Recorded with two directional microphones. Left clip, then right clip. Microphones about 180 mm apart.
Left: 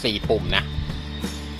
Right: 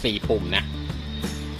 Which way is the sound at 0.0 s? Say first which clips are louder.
Left 1 dB; 5° right (ahead or behind).